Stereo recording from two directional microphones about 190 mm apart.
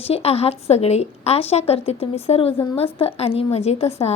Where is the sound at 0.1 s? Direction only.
30° left (ahead or behind).